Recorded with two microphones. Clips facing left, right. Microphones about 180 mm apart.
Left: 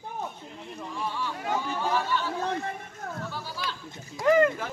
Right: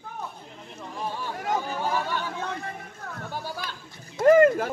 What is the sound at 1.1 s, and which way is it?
Chatter, 45° right (ahead or behind).